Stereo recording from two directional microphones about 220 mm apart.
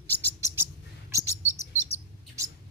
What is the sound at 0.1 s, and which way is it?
Bird, 10° left (ahead or behind).